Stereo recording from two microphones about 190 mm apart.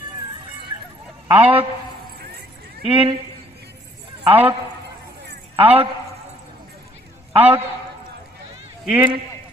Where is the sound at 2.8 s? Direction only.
30° right (ahead or behind).